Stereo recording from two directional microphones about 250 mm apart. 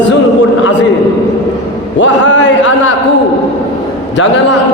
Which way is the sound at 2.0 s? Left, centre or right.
Left.